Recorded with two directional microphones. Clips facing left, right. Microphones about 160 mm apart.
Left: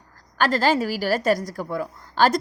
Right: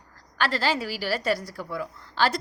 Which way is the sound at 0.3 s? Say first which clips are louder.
Left 6 dB; 45° left (ahead or behind).